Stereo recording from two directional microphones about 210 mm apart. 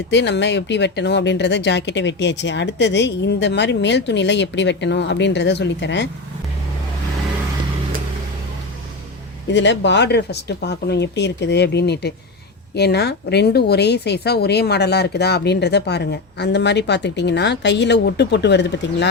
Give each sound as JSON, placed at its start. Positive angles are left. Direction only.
{"t": 0.1, "sound": "speech", "side_deg": 55}
{"t": 9.5, "sound": "speech", "side_deg": 55}